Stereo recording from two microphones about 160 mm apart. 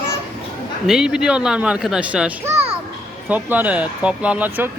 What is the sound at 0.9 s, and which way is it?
Speech, 5° right (ahead or behind).